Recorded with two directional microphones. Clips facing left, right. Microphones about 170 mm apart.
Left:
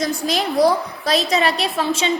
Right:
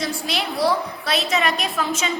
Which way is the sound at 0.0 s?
40° left (ahead or behind).